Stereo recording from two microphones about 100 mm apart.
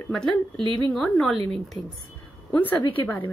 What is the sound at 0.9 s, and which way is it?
Speech, 5° left (ahead or behind).